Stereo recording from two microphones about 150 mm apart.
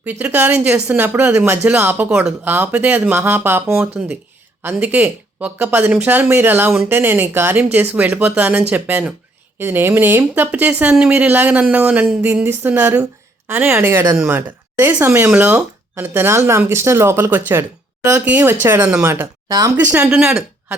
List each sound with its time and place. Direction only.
0.0 s a woman's voice: 10° right (ahead or behind)
19.9 s speech: 10° right (ahead or behind)